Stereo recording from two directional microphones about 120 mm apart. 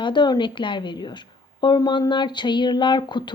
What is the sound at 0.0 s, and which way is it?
Speech, 40° left (ahead or behind).